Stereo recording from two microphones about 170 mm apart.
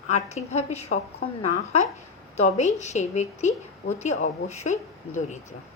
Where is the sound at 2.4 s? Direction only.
40° left (ahead or behind).